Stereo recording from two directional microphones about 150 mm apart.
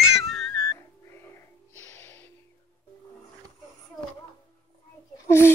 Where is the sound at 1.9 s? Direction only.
15° left (ahead or behind).